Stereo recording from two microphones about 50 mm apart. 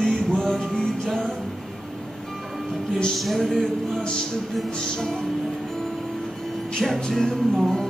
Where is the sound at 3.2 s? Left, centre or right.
Centre.